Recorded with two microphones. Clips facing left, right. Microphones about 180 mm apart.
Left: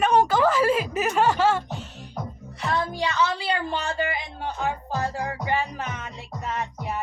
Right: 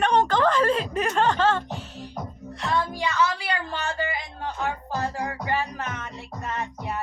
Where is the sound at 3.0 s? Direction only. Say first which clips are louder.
Even; 25° left (ahead or behind).